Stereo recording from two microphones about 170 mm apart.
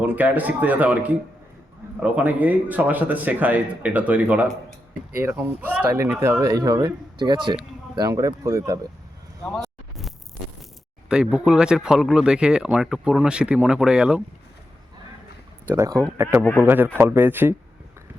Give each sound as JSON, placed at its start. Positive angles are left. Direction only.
{"t": 0.0, "sound": "speech", "side_deg": -10}
{"t": 11.1, "sound": "speech", "side_deg": -5}
{"t": 15.6, "sound": "speech", "side_deg": -15}